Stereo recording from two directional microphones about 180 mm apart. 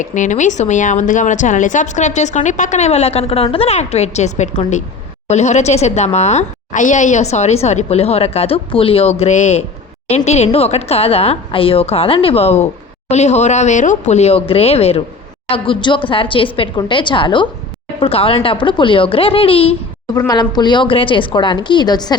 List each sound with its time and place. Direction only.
0.0 s a woman's voice: 45° left (ahead or behind); by 22.1 s 25° left (ahead or behind)